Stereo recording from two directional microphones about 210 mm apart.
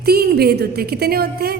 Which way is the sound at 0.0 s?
50° right (ahead or behind).